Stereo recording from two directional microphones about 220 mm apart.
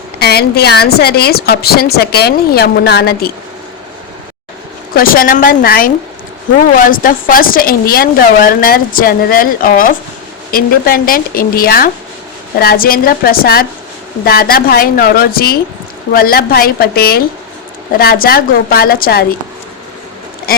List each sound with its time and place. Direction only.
0.2 s a woman's voice: 45° left (ahead or behind)
4.9 s a woman's voice: 40° left (ahead or behind)
20.5 s a woman's voice: 40° left (ahead or behind)